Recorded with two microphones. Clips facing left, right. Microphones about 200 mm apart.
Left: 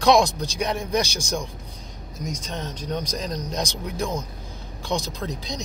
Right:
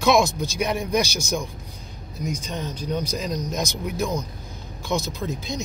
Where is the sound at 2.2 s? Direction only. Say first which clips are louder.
Right 2 dB; 10° right (ahead or behind).